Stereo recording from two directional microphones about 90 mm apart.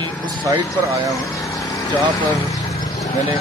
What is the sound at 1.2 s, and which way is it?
Vehicle, 35° left (ahead or behind).